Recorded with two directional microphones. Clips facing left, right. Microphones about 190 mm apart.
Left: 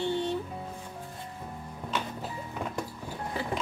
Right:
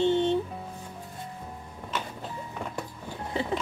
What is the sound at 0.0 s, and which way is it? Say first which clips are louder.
Music: right 6 dB; 20° right (ahead or behind).